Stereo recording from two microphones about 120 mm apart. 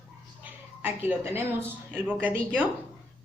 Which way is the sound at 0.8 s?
20° right (ahead or behind).